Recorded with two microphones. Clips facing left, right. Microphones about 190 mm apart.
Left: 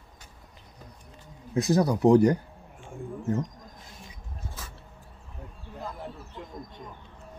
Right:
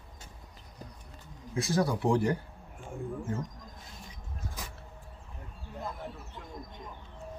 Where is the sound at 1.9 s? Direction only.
40° left (ahead or behind).